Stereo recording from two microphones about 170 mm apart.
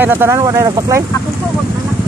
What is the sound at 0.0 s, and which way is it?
Speech, 10° right (ahead or behind).